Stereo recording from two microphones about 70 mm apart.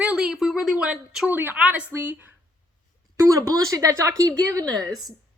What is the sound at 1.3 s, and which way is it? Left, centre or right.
Speech, right.